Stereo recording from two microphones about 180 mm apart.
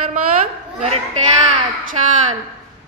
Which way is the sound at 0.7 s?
35° right (ahead or behind).